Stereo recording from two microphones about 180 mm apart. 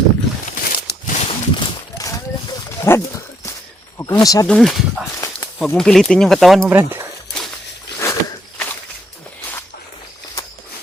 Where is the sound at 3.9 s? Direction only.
15° left (ahead or behind).